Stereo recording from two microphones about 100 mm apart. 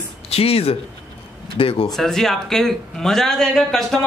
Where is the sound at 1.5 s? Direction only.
70° left (ahead or behind).